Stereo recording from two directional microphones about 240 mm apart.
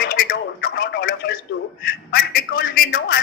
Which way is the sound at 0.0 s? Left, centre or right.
Left.